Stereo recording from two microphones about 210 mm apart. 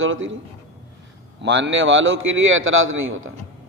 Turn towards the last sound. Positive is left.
turn(degrees=-70)  # may be behind; listen again after turning